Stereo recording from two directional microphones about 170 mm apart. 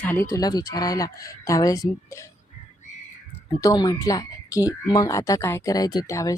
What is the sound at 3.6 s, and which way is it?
Speech, 20° left (ahead or behind).